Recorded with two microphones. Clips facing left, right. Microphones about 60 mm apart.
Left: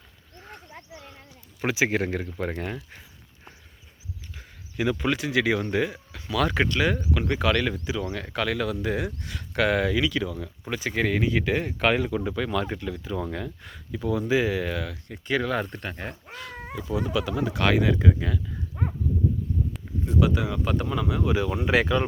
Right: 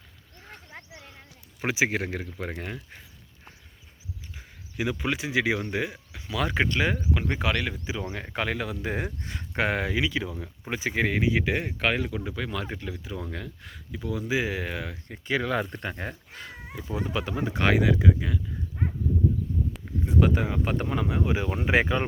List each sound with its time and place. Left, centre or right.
1.6 s speech: centre
1.9 s speech: centre
4.4 s speech: centre
14.3 s speech: centre
16.4 s speech: right
17.7 s speech: centre
20.1 s speech: right